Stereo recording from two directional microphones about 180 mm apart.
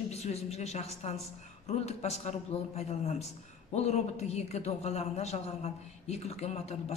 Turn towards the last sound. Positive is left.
turn(degrees=35)  # may be behind; listen again after turning